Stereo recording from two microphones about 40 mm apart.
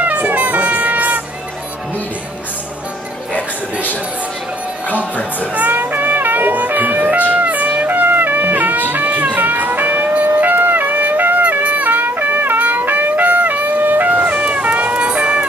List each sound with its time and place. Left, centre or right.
0.0 s music: right
5.5 s music: right